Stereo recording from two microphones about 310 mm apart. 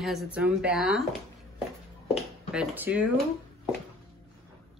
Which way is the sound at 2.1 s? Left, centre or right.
Centre.